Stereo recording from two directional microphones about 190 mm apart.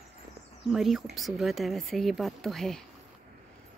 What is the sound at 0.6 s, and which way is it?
Speech, centre (ahead or behind).